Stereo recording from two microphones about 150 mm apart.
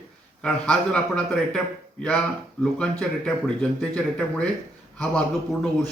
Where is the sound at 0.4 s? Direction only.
5° left (ahead or behind).